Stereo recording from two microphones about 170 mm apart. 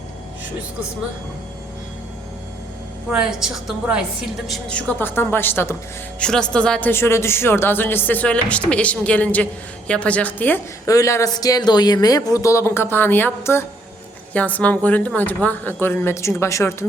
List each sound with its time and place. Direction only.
3.1 s a woman's voice: 5° right (ahead or behind)
4.9 s speech: 15° left (ahead or behind)